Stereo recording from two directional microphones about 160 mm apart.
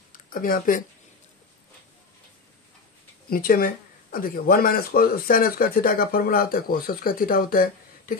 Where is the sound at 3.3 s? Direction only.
65° left (ahead or behind).